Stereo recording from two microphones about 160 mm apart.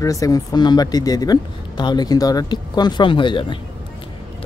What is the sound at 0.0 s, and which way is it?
Speech, 20° left (ahead or behind).